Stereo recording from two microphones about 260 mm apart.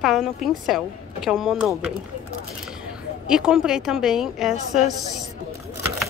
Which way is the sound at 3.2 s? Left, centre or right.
Centre.